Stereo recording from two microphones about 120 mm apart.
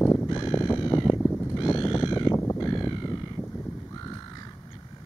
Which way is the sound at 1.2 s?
5° left (ahead or behind).